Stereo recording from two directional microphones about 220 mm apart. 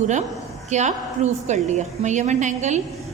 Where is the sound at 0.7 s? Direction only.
30° right (ahead or behind).